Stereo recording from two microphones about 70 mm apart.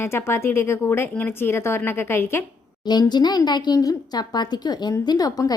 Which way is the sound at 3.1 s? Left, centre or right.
Left.